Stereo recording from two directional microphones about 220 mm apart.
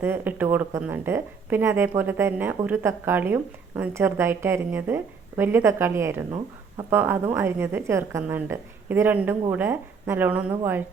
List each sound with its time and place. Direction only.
0.0 s a woman's voice: 10° right (ahead or behind)